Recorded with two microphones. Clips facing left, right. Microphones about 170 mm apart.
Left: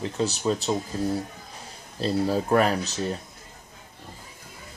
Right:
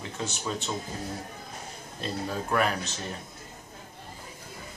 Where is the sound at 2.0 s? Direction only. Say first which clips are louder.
Left 9 dB; 35° left (ahead or behind).